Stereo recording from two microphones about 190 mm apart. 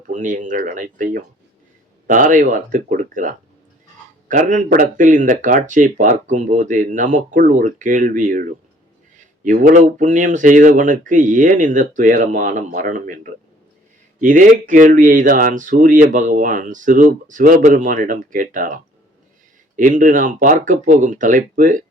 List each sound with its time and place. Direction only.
0.1 s speech: 40° right (ahead or behind)
14.2 s speech: 45° right (ahead or behind)